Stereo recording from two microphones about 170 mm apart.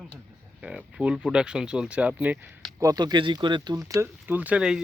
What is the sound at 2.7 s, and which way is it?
Speech, 20° right (ahead or behind).